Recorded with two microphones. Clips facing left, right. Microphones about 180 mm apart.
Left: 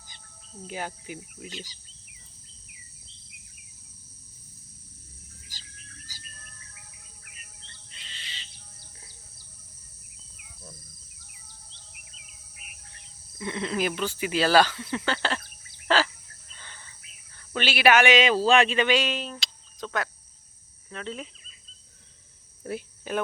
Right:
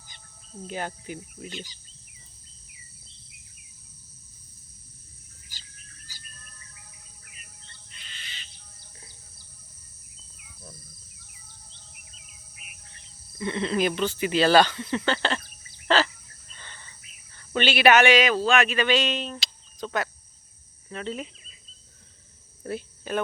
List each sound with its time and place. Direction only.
0.7 s speech: 10° left (ahead or behind)
7.9 s owl: 30° left (ahead or behind)
13.4 s speech: 5° left (ahead or behind)
15.9 s bird: 10° left (ahead or behind)
16.6 s cricket: 5° left (ahead or behind)
17.5 s speech: 5° left (ahead or behind)
18.1 s speech: 25° left (ahead or behind)
18.9 s speech: 10° left (ahead or behind)
22.6 s speech: 10° left (ahead or behind)